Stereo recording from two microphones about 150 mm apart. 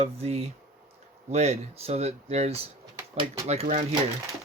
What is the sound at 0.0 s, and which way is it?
Speech, 45° right (ahead or behind).